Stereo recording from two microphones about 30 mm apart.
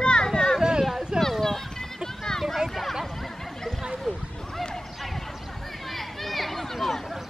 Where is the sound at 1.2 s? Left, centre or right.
Centre.